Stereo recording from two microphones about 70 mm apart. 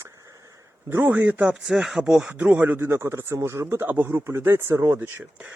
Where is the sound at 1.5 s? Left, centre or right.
Centre.